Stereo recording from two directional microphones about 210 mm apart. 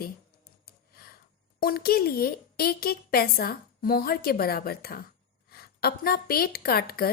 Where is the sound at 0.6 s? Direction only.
45° left (ahead or behind).